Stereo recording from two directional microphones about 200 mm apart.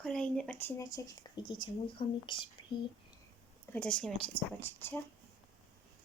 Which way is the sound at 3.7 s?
5° left (ahead or behind).